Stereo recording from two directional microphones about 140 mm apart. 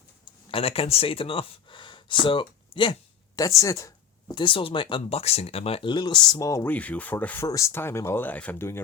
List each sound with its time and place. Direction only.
0.5 s speech: 45° left (ahead or behind)
3.6 s a sound: 20° left (ahead or behind)
4.4 s speech: 40° left (ahead or behind)
6.7 s speech: 10° left (ahead or behind)